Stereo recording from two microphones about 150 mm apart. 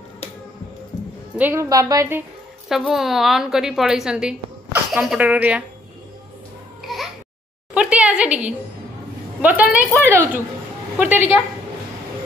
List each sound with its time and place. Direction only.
1.4 s a woman's voice: 20° right (ahead or behind)
2.7 s a woman's voice: centre (ahead or behind)
6.8 s babbling: centre (ahead or behind)
7.7 s a sound: 5° right (ahead or behind)
9.4 s speech: 10° right (ahead or behind)